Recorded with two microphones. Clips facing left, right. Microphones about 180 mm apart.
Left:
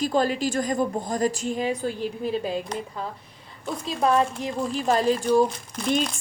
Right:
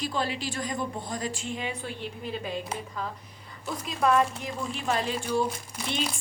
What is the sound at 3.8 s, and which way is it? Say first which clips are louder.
A woman's voice: left 2 dB; 30° left (ahead or behind).